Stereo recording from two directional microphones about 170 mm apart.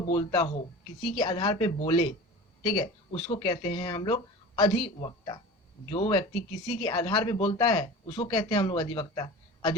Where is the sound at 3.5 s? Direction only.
25° left (ahead or behind).